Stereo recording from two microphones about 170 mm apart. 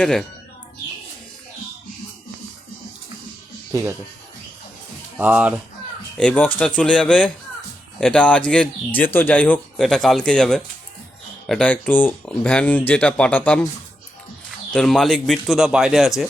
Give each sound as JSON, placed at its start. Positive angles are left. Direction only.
{"t": 0.0, "sound": "speech", "side_deg": 5}
{"t": 3.7, "sound": "speech", "side_deg": -20}
{"t": 5.1, "sound": "speech", "side_deg": -10}
{"t": 6.1, "sound": "speech", "side_deg": 10}
{"t": 14.7, "sound": "speech", "side_deg": 5}